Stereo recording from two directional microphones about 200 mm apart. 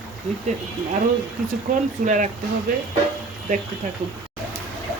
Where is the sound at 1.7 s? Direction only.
40° right (ahead or behind).